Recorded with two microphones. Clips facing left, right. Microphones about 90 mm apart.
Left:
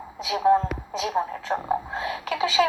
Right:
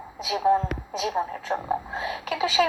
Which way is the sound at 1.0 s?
30° left (ahead or behind).